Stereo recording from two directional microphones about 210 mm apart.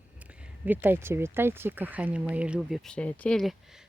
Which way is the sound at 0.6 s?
10° right (ahead or behind).